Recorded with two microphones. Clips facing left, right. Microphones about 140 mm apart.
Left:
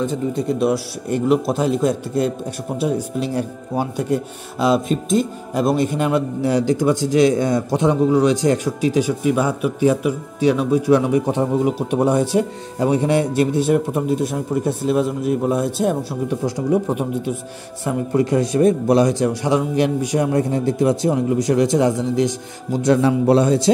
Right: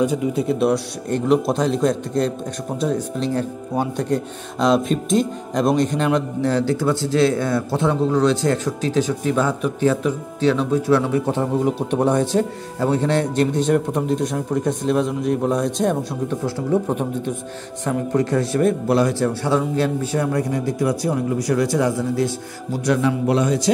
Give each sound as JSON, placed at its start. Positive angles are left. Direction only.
{"t": 0.0, "sound": "a man's voice", "side_deg": -10}
{"t": 23.0, "sound": "a man's voice", "side_deg": 30}